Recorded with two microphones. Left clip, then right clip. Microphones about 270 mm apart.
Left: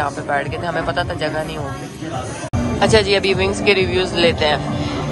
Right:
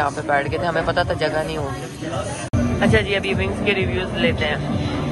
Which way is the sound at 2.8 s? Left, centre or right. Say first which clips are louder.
Left 5 dB; centre.